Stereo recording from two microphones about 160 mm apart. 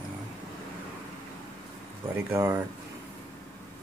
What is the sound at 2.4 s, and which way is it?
Speech, 20° right (ahead or behind).